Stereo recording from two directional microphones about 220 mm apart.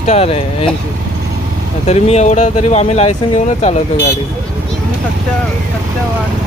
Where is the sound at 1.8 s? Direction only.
30° left (ahead or behind).